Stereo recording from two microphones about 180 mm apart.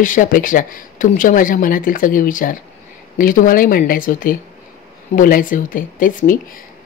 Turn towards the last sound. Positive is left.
turn(degrees=50)  # may be behind; listen again after turning